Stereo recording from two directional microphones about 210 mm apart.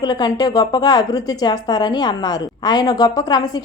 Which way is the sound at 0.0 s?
20° left (ahead or behind).